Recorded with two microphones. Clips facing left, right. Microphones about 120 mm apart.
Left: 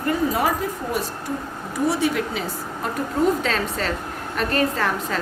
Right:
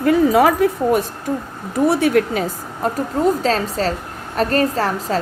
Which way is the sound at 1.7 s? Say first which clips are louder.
Right 7 dB; 60° right (ahead or behind).